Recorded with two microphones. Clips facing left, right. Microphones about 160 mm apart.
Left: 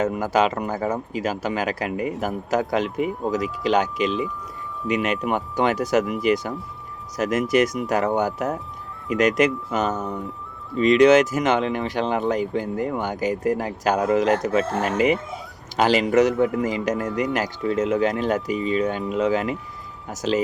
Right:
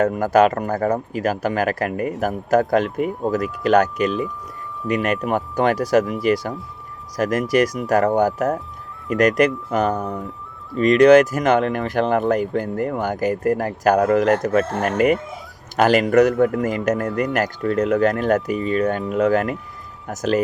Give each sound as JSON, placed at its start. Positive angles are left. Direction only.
{"t": 0.0, "sound": "speech", "side_deg": -55}
{"t": 10.8, "sound": "speech", "side_deg": -45}